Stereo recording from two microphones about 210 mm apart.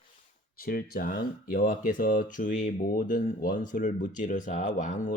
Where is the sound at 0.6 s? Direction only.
45° left (ahead or behind).